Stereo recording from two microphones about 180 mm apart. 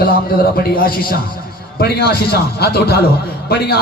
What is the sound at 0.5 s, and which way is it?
A man's voice, 55° left (ahead or behind).